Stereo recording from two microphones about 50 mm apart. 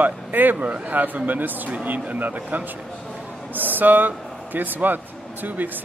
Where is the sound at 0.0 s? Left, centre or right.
Right.